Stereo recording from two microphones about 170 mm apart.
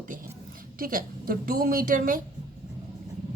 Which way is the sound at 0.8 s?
55° right (ahead or behind).